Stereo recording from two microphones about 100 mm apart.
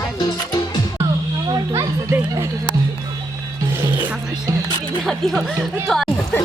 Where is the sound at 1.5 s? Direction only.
35° right (ahead or behind).